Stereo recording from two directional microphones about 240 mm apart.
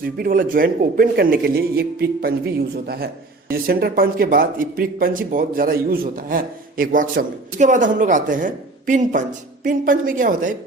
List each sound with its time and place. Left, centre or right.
0.2 s speech: right